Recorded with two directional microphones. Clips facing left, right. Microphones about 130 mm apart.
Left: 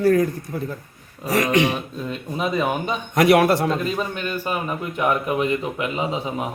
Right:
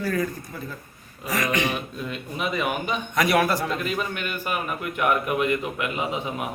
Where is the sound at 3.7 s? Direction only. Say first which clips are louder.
Left 4 dB; 30° left (ahead or behind).